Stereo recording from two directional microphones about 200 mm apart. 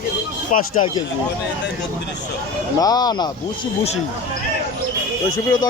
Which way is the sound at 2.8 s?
20° left (ahead or behind).